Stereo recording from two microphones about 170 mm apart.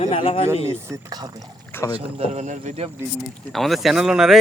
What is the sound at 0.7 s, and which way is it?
Speech, 20° right (ahead or behind).